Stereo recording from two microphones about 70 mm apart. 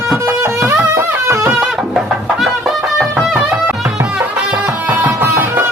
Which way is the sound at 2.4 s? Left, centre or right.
Centre.